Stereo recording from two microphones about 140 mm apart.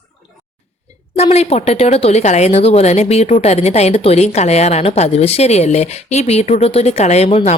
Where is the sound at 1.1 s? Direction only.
50° left (ahead or behind).